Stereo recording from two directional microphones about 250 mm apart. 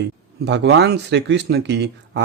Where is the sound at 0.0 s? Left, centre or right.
Right.